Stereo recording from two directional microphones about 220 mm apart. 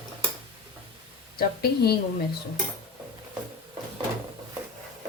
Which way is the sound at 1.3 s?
45° left (ahead or behind).